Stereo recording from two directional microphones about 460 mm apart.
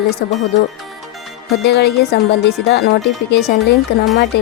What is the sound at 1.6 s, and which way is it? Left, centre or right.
Speech, left.